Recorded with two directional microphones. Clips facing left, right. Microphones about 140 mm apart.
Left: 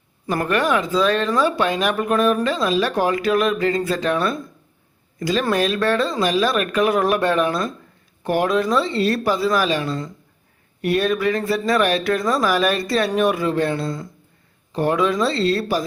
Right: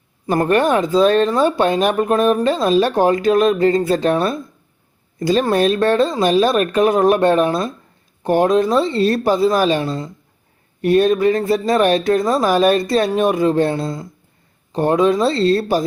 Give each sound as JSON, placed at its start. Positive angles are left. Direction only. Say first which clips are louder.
{"t": 0.3, "sound": "speech", "louder": "right 5 dB", "side_deg": -35}
{"t": 0.9, "sound": "speech", "louder": "right 5 dB", "side_deg": -25}
{"t": 7.3, "sound": "speech", "louder": "right 4 dB", "side_deg": -35}
{"t": 8.5, "sound": "speech", "louder": "right 4 dB", "side_deg": -25}